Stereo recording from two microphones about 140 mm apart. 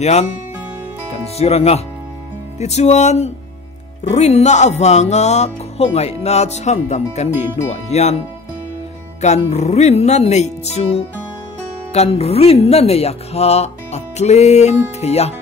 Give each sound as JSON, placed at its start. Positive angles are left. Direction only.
{"t": 0.0, "sound": "music", "side_deg": 50}
{"t": 1.4, "sound": "music", "side_deg": 45}
{"t": 9.2, "sound": "music", "side_deg": 50}